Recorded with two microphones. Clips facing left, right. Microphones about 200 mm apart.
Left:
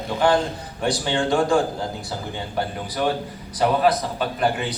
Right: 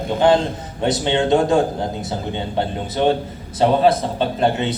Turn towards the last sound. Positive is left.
turn(degrees=-25)  # may be behind; listen again after turning